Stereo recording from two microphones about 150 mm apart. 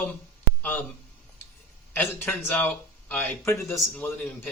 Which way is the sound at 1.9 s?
15° left (ahead or behind).